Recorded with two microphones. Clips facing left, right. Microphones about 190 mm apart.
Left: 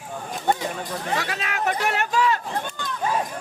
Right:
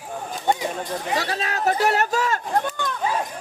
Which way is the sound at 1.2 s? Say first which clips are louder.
Right 2 dB; 35° right (ahead or behind).